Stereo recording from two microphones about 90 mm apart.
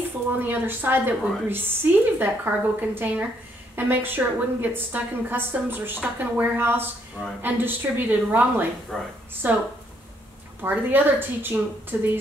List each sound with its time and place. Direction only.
0.4 s a woman's voice: 20° right (ahead or behind)
8.9 s a woman's voice: 5° left (ahead or behind)
9.4 s a woman's voice: 20° right (ahead or behind)